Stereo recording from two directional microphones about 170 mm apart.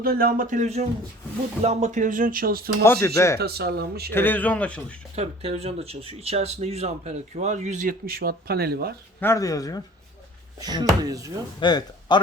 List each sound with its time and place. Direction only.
0.0 s speech: 60° right (ahead or behind)
2.8 s speech: 15° left (ahead or behind)
3.3 s speech: 65° right (ahead or behind)
4.1 s speech: 10° left (ahead or behind)
5.1 s speech: 35° right (ahead or behind); by 9.0 s 65° right (ahead or behind)
9.2 s speech: 20° left (ahead or behind)
10.6 s speech: 25° right (ahead or behind)
11.6 s speech: 25° left (ahead or behind)